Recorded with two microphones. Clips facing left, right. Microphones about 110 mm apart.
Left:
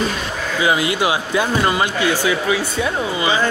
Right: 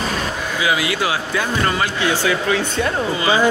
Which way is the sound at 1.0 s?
15° left (ahead or behind).